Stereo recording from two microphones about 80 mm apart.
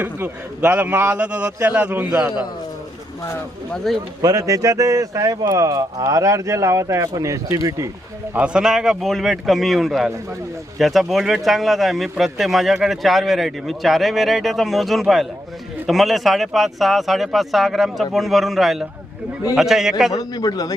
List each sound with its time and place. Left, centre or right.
0.0 s a man's voice: right
3.9 s speech: centre
4.2 s speech: right
8.4 s speech: centre
20.1 s a man's voice: left